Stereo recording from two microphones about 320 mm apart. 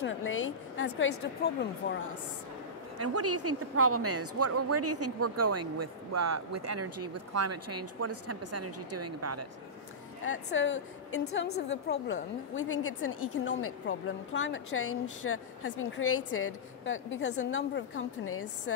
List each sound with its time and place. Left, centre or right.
0.0 s a woman's voice: left
3.0 s a woman's voice: right
10.2 s a woman's voice: left